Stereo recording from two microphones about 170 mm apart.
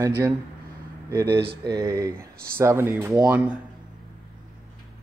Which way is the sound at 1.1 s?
15° right (ahead or behind).